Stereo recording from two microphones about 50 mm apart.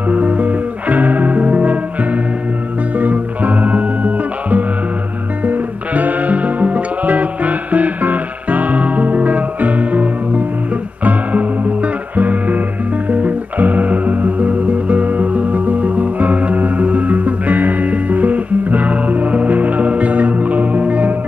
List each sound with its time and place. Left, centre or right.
0.1 s music: right
3.0 s music: right